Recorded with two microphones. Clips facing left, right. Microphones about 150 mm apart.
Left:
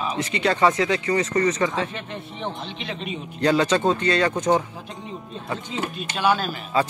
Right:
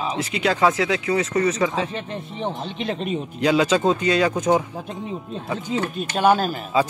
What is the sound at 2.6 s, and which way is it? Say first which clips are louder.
Speech: right 6 dB; 45° right (ahead or behind).